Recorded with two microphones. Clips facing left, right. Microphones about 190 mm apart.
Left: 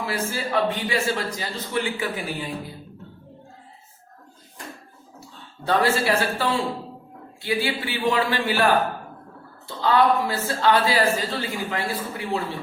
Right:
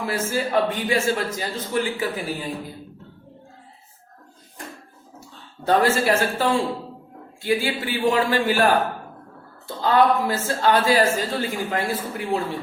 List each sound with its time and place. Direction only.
0.0 s a man's voice: 45° right (ahead or behind)
5.6 s a man's voice: 45° right (ahead or behind)